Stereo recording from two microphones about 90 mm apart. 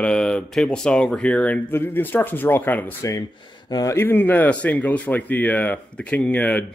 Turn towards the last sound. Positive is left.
turn(degrees=15)  # may be behind; listen again after turning